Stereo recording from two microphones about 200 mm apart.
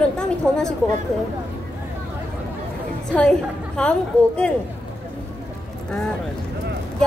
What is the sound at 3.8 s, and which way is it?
Speech, 5° left (ahead or behind).